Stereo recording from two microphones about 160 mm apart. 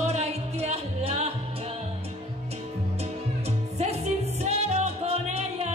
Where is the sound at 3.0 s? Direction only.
40° right (ahead or behind).